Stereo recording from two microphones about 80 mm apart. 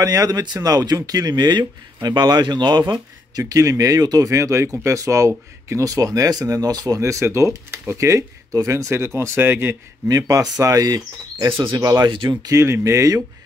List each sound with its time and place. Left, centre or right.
0.0 s speech: right
2.9 s speech: right
4.3 s speech: right
7.0 s speech: right
10.0 s speech: right
12.1 s speech: right
12.4 s speech: right